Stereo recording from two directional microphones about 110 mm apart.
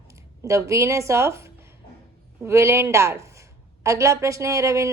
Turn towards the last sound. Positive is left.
turn(degrees=-30)  # may be behind; listen again after turning